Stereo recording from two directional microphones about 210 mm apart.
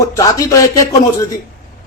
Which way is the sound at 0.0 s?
15° left (ahead or behind).